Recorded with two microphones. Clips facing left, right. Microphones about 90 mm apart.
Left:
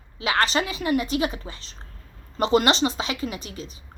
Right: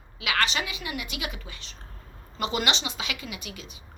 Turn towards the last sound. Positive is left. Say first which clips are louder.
# left 5 dB
turn(degrees=35)  # may be behind; listen again after turning